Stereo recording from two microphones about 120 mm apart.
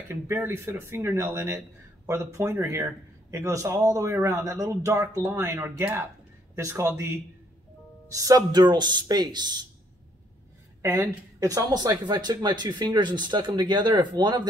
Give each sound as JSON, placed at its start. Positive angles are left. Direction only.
{"t": 0.1, "sound": "a man's voice", "side_deg": -20}
{"t": 10.8, "sound": "a woman's voice", "side_deg": -20}
{"t": 11.3, "sound": "speech", "side_deg": -30}